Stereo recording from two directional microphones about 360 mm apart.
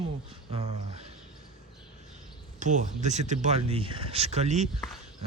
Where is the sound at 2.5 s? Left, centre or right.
Centre.